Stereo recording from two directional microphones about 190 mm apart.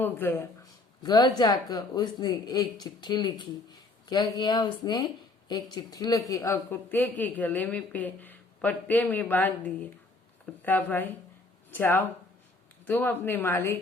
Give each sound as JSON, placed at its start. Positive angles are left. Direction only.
{"t": 0.0, "sound": "speech", "side_deg": 10}
{"t": 1.0, "sound": "a man's voice", "side_deg": 20}